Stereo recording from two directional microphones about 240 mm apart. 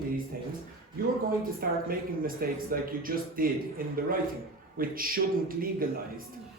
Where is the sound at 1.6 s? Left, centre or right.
Right.